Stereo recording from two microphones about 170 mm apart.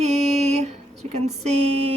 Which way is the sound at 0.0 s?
40° right (ahead or behind).